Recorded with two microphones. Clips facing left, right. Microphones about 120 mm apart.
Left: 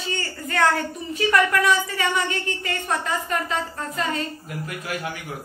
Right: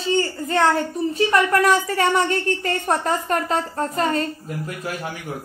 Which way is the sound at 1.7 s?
40° right (ahead or behind).